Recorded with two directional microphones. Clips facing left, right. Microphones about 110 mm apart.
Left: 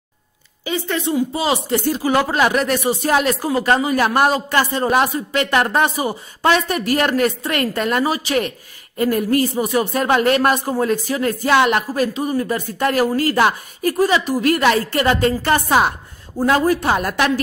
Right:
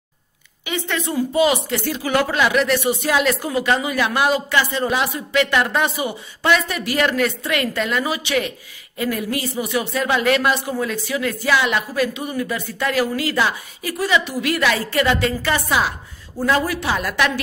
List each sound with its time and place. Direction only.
0.7 s speech: 30° left (ahead or behind); by 15.9 s 50° left (ahead or behind)
16.3 s speech: 40° left (ahead or behind)